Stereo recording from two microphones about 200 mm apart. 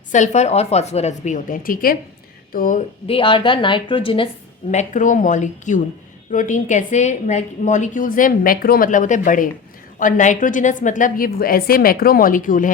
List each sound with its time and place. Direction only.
0.1 s a woman's voice: 35° left (ahead or behind)
3.1 s a woman's voice: 25° left (ahead or behind)
4.7 s a woman's voice: 35° left (ahead or behind)